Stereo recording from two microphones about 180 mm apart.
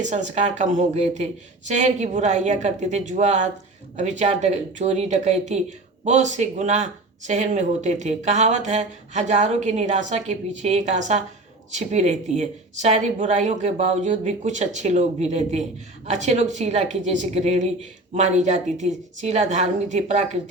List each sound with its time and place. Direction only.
0.0 s speech: 40° right (ahead or behind)